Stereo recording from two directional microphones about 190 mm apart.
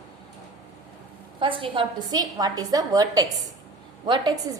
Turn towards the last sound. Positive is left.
turn(degrees=-20)  # may be behind; listen again after turning